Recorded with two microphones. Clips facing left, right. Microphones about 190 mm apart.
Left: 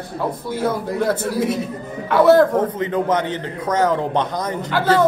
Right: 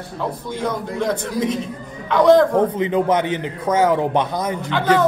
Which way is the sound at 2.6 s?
15° right (ahead or behind).